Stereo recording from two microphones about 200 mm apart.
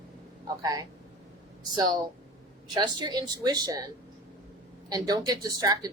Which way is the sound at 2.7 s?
20° right (ahead or behind).